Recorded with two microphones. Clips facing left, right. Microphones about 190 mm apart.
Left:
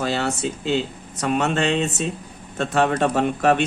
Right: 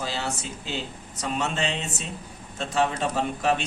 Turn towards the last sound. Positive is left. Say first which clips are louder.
# left 6 dB
turn(degrees=60)  # may be behind; listen again after turning